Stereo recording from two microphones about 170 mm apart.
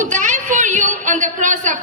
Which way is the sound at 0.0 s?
50° right (ahead or behind).